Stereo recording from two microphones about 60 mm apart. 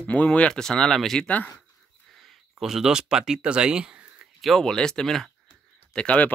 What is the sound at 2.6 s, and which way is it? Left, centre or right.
Speech, centre.